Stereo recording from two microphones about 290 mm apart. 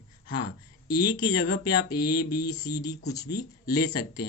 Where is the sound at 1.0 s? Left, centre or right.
Left.